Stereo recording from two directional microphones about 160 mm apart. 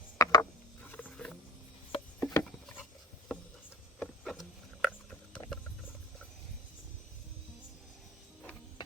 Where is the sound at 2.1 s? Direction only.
15° left (ahead or behind).